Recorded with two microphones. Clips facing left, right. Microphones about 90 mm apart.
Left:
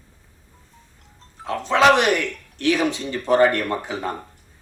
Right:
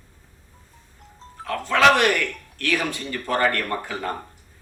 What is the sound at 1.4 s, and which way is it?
A man's voice, 20° left (ahead or behind).